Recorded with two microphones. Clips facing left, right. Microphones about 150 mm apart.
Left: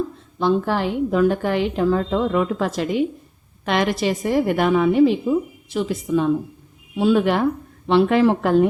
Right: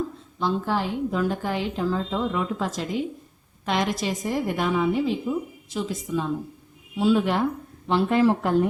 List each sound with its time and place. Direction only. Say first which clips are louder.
0.3 s a woman's voice: left 5 dB; 65° left (ahead or behind)
7.9 s a woman's voice: left 4 dB; 80° left